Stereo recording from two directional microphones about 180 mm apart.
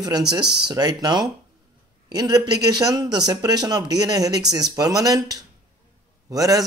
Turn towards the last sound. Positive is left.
turn(degrees=-20)  # may be behind; listen again after turning